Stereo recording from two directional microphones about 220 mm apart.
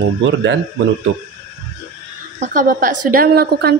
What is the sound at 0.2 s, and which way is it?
Speech, 55° right (ahead or behind).